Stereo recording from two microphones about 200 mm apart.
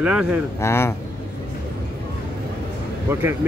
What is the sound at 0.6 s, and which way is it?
Speech, 15° left (ahead or behind).